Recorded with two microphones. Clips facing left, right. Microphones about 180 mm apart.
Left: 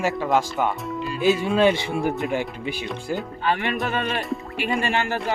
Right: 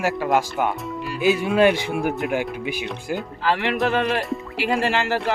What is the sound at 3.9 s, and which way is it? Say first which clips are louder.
Speech: right 4 dB; 75° right (ahead or behind).